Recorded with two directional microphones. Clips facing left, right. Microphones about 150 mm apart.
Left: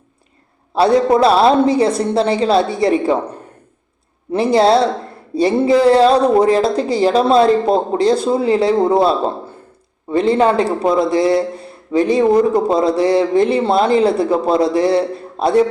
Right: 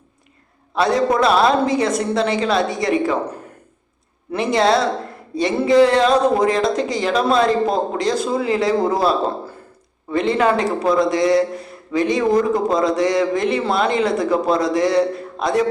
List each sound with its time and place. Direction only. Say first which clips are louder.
0.8 s speech: left 5 dB; 30° left (ahead or behind)
4.3 s a man's voice: left 4 dB; 30° left (ahead or behind)